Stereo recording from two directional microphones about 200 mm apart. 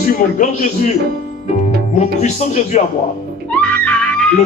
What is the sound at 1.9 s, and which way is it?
Speech, 35° left (ahead or behind).